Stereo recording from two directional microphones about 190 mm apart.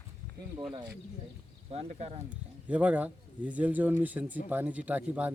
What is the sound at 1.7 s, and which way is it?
Speech, 35° right (ahead or behind).